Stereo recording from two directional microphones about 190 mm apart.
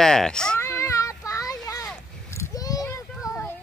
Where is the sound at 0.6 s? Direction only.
15° left (ahead or behind).